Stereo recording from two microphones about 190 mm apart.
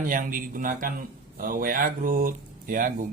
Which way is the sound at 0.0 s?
45° right (ahead or behind).